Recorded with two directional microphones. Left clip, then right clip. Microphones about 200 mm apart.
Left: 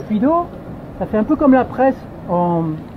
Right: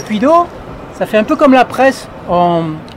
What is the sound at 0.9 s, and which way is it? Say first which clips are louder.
Speech: right 6 dB; 35° right (ahead or behind).